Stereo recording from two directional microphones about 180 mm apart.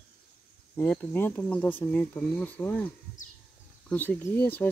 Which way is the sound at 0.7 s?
10° left (ahead or behind).